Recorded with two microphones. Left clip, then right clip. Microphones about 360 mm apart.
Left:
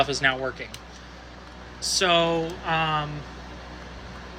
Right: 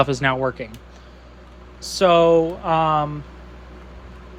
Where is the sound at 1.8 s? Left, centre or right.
Centre.